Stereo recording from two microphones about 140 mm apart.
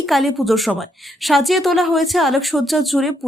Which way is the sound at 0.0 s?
Centre (ahead or behind).